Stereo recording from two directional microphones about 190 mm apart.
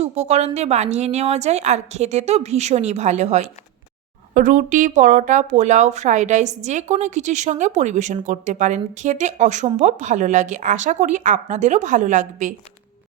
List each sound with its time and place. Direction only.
0.0 s speech: 35° right (ahead or behind)